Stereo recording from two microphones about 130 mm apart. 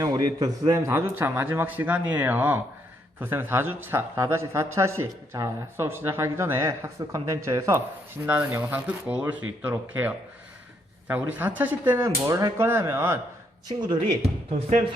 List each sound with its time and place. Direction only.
0.0 s a man's voice: 30° right (ahead or behind)
13.7 s speech: 35° right (ahead or behind)